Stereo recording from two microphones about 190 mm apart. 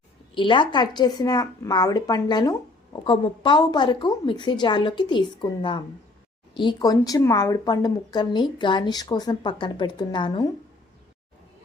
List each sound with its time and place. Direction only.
0.3 s speech: 25° left (ahead or behind)